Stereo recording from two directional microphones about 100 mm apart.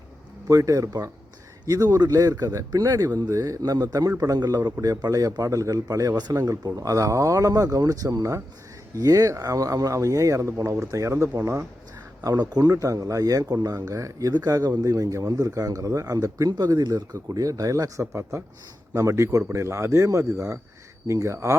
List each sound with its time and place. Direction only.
0.4 s speech: 35° right (ahead or behind)
12.2 s speech: 40° right (ahead or behind)